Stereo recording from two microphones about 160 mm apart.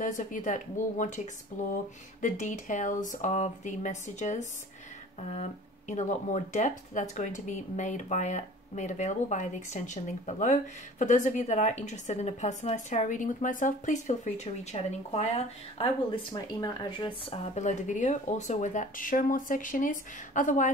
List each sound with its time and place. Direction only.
0.0 s speech: 55° left (ahead or behind); by 17.6 s 35° left (ahead or behind)
17.6 s speech: 50° left (ahead or behind)